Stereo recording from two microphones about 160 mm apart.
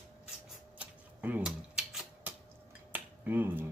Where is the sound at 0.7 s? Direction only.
10° right (ahead or behind).